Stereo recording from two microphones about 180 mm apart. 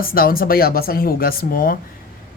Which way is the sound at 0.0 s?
55° left (ahead or behind).